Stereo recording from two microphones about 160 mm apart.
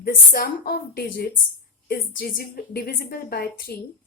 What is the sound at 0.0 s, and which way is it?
A woman's voice, 70° left (ahead or behind).